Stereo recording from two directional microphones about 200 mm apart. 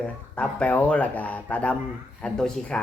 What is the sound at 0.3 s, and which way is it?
Speech, 5° left (ahead or behind).